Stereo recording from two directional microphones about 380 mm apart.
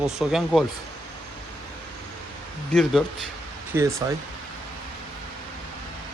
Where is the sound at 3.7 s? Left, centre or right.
Centre.